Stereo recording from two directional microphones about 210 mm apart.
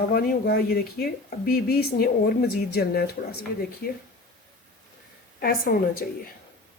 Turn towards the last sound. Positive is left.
turn(degrees=45)  # may be behind; listen again after turning